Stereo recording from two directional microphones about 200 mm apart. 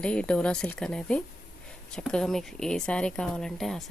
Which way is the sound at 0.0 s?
5° left (ahead or behind).